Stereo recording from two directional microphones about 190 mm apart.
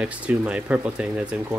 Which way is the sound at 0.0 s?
5° right (ahead or behind).